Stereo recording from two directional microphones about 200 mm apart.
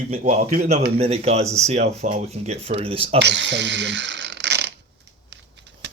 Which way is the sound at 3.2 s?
60° right (ahead or behind).